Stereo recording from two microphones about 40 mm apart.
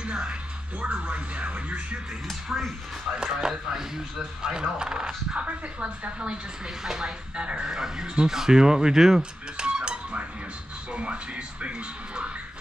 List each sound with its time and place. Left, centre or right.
0.0 s music: right
1.0 s speech: right
2.2 s speech: centre
3.2 s speech: centre
6.8 s speech: centre
9.7 s cutlery: right
10.9 s speech: right